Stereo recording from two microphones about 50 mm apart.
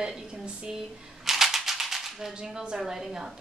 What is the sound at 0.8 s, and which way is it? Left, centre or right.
Typewriter, centre.